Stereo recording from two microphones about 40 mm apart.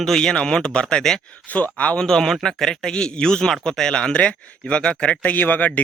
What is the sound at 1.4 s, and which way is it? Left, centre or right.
Speech, left.